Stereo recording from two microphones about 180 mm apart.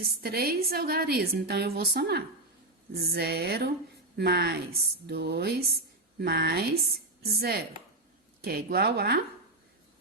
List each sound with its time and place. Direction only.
0.0 s a woman's voice: 60° right (ahead or behind)